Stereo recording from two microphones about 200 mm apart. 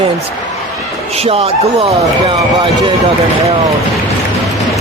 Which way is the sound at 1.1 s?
30° right (ahead or behind).